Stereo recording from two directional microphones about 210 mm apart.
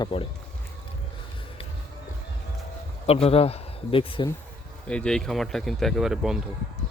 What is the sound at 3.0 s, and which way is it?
Speech, 30° left (ahead or behind).